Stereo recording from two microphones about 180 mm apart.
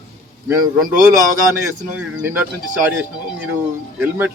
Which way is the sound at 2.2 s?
10° right (ahead or behind).